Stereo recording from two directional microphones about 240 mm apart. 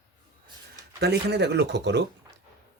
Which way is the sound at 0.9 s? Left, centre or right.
Right.